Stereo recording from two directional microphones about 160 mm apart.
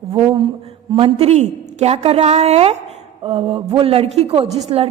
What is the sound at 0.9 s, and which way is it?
A woman's voice, 35° right (ahead or behind).